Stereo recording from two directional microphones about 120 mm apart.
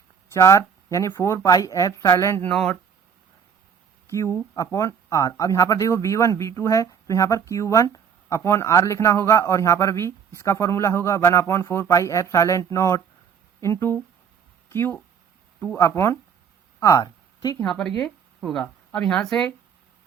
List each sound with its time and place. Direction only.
0.3 s speech: 25° left (ahead or behind)
2.5 s speech: 5° left (ahead or behind)
4.1 s speech: 25° left (ahead or behind)
16.8 s a sound: 30° left (ahead or behind)
17.6 s speech: 5° left (ahead or behind)